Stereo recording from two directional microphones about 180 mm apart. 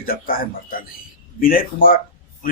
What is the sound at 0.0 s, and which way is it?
Speech, 55° left (ahead or behind).